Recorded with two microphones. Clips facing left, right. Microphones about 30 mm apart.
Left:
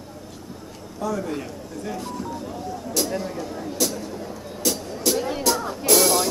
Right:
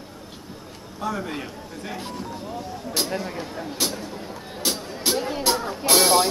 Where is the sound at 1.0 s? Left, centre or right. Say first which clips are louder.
Left 2 dB; right.